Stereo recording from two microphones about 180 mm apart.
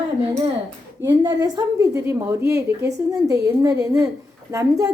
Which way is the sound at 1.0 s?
25° right (ahead or behind).